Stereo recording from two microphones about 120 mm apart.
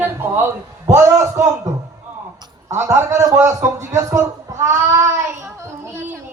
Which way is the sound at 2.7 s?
20° right (ahead or behind).